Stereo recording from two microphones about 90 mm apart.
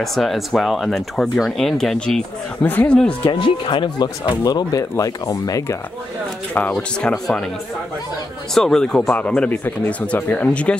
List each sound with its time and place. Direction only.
0.0 s speech: centre (ahead or behind)
3.3 s speech: 65° left (ahead or behind)
4.4 s speech: 45° left (ahead or behind)
6.7 s speech: 5° left (ahead or behind)
8.5 s speech: 5° left (ahead or behind)